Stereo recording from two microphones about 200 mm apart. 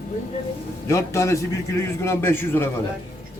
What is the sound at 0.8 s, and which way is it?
Speech, 15° left (ahead or behind).